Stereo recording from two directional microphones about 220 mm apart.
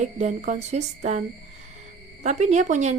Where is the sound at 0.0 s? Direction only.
30° right (ahead or behind).